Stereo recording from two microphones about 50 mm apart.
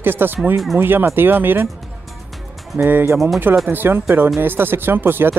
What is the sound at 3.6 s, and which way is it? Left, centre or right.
Speech, right.